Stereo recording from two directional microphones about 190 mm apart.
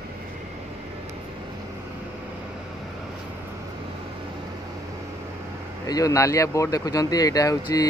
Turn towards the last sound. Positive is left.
turn(degrees=20)  # may be behind; listen again after turning